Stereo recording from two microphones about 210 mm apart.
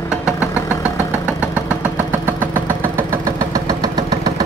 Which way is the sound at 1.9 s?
10° right (ahead or behind).